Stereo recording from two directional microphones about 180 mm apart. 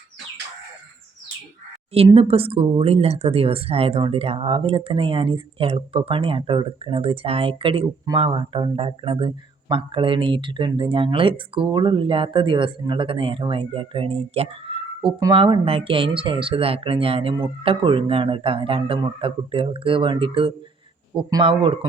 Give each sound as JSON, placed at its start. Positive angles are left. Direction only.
{"t": 2.0, "sound": "speech", "side_deg": -30}